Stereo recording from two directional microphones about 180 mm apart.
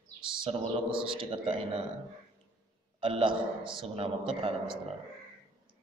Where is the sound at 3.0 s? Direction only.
30° right (ahead or behind).